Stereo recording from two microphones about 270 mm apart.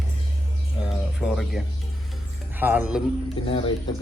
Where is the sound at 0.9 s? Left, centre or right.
Centre.